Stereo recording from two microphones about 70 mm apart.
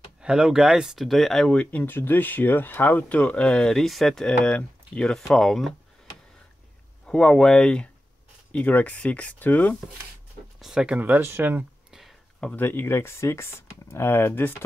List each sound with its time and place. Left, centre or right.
0.2 s speech: centre
1.5 s speech: centre
5.3 s speech: centre
7.1 s speech: centre
10.6 s speech: centre
11.0 s speech: right
12.5 s speech: left